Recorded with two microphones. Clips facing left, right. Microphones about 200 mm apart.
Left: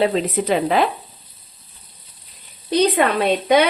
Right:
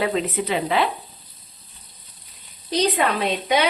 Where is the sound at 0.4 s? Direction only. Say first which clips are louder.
Left 6 dB; 45° left (ahead or behind).